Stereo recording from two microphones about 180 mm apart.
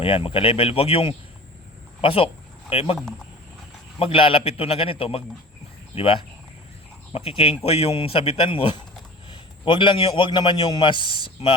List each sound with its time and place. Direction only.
0.0 s a man's voice: 30° left (ahead or behind)
4.0 s a man's voice: 30° left (ahead or behind)